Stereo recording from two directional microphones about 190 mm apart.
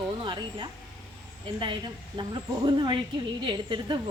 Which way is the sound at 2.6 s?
25° right (ahead or behind).